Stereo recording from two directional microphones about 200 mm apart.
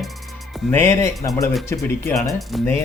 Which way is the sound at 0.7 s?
10° left (ahead or behind).